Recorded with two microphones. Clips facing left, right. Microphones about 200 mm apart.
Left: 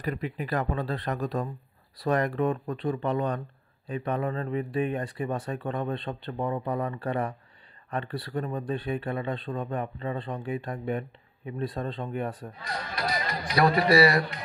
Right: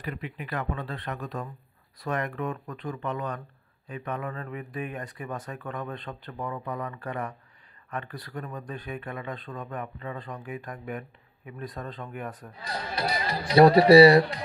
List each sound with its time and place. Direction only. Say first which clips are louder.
0.0 s speech: left 5 dB; 40° left (ahead or behind)
12.6 s speech: right 2 dB; 30° right (ahead or behind)